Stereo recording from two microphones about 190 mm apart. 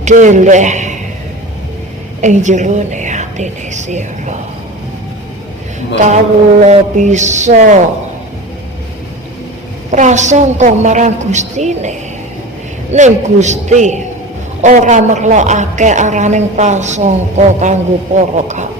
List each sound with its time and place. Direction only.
0.0 s a man's voice: 40° right (ahead or behind)
2.2 s a man's voice: 40° right (ahead or behind)
6.6 s a man's voice: 40° right (ahead or behind)
9.9 s a man's voice: 40° right (ahead or behind)